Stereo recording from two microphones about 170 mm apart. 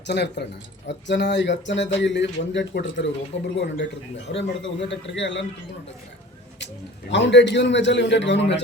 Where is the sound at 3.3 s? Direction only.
40° left (ahead or behind).